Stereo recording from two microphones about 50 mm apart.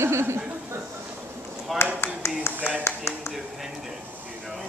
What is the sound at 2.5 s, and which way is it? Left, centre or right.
Clapping, left.